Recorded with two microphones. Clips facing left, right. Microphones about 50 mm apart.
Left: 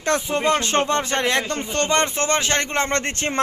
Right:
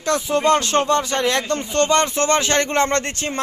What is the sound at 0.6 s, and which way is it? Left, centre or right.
Speech, left.